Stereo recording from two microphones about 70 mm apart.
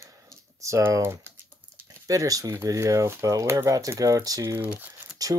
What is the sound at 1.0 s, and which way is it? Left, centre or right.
Speech, right.